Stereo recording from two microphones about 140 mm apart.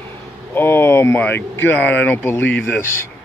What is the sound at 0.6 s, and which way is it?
Speech, 15° left (ahead or behind).